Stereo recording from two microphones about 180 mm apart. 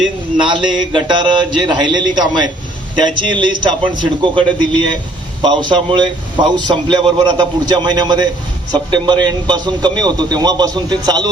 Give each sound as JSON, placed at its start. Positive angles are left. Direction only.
{"t": 0.4, "sound": "a man's voice", "side_deg": -25}